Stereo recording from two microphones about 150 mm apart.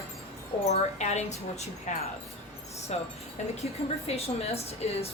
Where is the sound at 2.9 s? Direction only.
45° left (ahead or behind).